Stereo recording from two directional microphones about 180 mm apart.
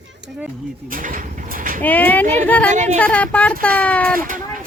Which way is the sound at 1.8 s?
10° left (ahead or behind).